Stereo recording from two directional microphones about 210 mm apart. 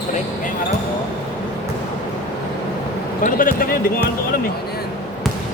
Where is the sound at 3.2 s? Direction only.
40° left (ahead or behind).